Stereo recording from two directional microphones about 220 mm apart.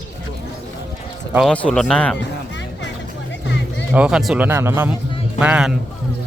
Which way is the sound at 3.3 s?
55° left (ahead or behind).